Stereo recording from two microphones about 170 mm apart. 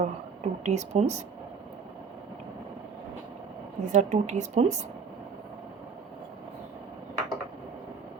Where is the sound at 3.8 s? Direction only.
45° right (ahead or behind).